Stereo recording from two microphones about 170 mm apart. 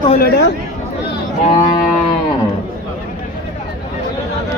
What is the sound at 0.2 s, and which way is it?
Speech, 70° left (ahead or behind).